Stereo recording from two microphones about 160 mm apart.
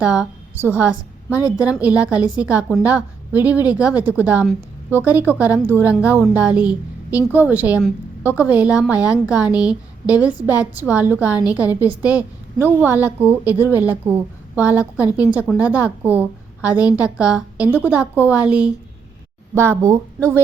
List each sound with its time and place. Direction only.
0.0 s a woman's voice: 5° right (ahead or behind)